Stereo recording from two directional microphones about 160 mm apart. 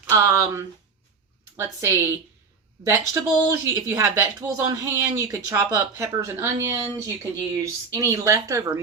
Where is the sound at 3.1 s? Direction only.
20° right (ahead or behind).